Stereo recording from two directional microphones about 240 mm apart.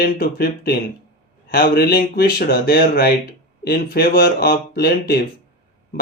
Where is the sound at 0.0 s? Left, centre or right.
Left.